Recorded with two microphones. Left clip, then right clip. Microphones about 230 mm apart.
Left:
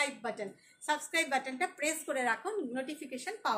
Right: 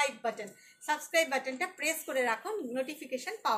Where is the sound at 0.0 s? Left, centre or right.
Centre.